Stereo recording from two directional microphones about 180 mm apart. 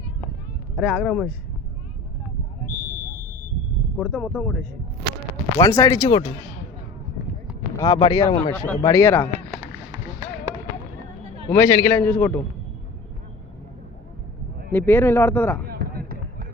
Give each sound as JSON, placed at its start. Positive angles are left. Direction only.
{"t": 0.8, "sound": "speech", "side_deg": -5}
{"t": 3.9, "sound": "a man's voice", "side_deg": 5}
{"t": 5.5, "sound": "speech", "side_deg": 20}
{"t": 7.8, "sound": "speech", "side_deg": 25}
{"t": 8.5, "sound": "a man's voice", "side_deg": 5}
{"t": 11.5, "sound": "a man's voice", "side_deg": 10}
{"t": 14.7, "sound": "a man's voice", "side_deg": 10}
{"t": 15.6, "sound": "basketball bounce", "side_deg": -55}